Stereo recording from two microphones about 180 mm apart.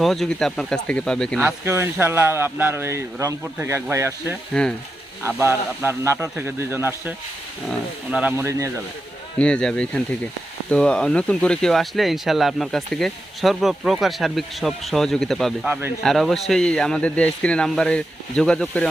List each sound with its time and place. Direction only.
0.0 s speech: centre (ahead or behind)
1.4 s speech: 10° right (ahead or behind)
9.4 s speech: 5° left (ahead or behind)